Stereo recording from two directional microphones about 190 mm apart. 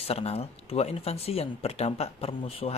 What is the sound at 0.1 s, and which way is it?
Speech, 30° left (ahead or behind).